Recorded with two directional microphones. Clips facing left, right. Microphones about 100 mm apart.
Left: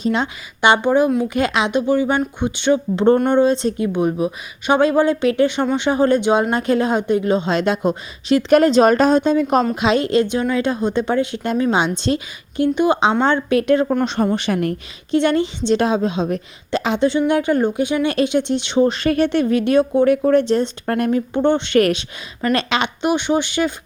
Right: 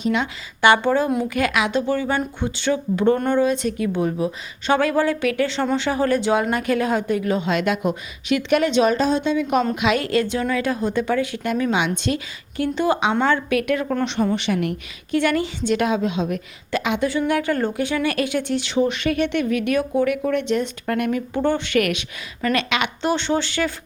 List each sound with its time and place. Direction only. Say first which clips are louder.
0.0 s speech: left 2 dB; 30° left (ahead or behind)
0.6 s a woman's voice: left 2 dB; 20° left (ahead or behind)
13.2 s a woman's voice: left 4 dB; 30° left (ahead or behind)
15.1 s a woman's voice: left 4 dB; 25° left (ahead or behind)
23.0 s speech: left 3 dB; 15° left (ahead or behind)